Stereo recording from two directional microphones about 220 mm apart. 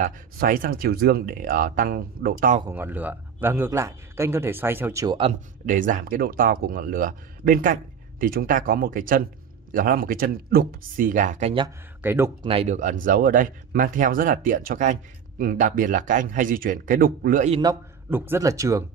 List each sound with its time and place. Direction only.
0.0 s speech: 40° right (ahead or behind)
2.6 s a man's voice: 10° right (ahead or behind)
5.7 s speech: 35° right (ahead or behind)
11.6 s a man's voice: 10° right (ahead or behind)
12.4 s speech: 30° right (ahead or behind)
17.6 s a man's voice: 15° right (ahead or behind)